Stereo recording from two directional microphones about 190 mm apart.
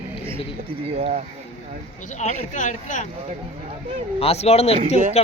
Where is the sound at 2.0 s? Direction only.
40° left (ahead or behind).